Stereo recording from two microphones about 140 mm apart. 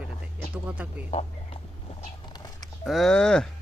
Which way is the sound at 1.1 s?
45° left (ahead or behind).